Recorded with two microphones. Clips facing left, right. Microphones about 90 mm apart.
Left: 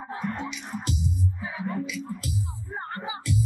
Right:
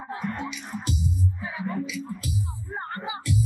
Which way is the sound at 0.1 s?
Centre (ahead or behind).